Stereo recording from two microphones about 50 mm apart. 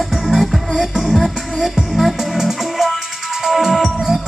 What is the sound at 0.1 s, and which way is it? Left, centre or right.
Music, centre.